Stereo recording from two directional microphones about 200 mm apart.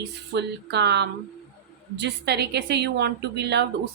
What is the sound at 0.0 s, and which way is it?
Speech, 55° right (ahead or behind).